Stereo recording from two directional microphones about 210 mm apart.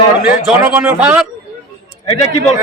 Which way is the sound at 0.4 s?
10° right (ahead or behind).